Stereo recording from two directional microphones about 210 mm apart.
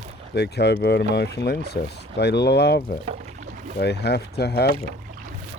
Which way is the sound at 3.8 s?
50° left (ahead or behind).